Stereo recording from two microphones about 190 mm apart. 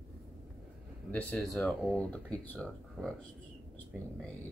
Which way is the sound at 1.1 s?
5° left (ahead or behind).